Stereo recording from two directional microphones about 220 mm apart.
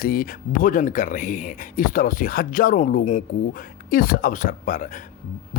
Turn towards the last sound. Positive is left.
turn(degrees=35)  # may be behind; listen again after turning